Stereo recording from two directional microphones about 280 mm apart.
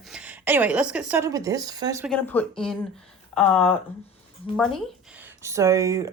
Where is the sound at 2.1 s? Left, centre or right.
Centre.